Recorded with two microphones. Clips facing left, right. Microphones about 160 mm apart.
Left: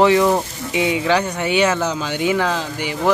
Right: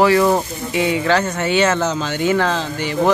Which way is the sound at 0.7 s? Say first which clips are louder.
Right 1 dB; 15° left (ahead or behind).